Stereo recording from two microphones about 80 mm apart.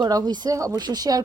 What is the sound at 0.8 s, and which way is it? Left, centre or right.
Speech, right.